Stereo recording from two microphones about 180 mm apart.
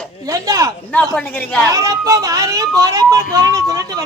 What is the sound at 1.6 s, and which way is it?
Speech, 20° right (ahead or behind).